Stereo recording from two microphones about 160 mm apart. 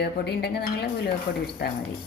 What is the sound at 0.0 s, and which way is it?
A woman's voice, 90° left.